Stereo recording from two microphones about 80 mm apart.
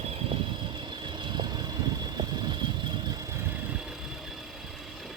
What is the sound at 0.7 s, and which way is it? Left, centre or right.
Vehicle, right.